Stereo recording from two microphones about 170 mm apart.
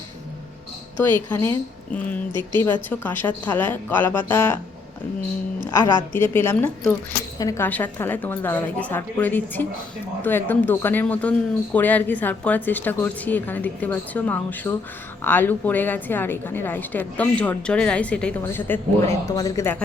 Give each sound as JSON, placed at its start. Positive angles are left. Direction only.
{"t": 1.0, "sound": "speech", "side_deg": 10}
{"t": 5.7, "sound": "speech", "side_deg": 15}